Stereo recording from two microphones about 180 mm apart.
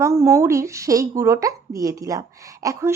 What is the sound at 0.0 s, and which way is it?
Speech, 15° right (ahead or behind).